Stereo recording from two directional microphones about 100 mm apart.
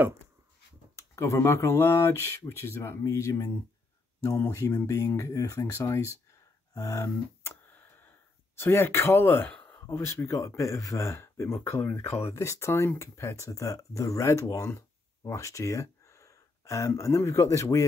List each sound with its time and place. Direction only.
1.1 s speech: 30° left (ahead or behind)
8.5 s speech: 25° left (ahead or behind)